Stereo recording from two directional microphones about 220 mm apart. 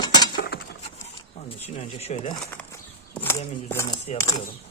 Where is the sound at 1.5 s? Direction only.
25° left (ahead or behind).